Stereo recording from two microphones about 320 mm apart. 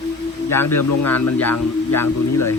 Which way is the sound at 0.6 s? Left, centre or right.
Left.